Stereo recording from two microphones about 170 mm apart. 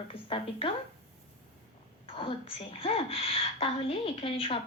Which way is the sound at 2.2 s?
30° left (ahead or behind).